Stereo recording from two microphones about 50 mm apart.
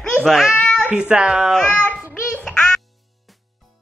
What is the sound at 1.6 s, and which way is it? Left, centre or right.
Speech, left.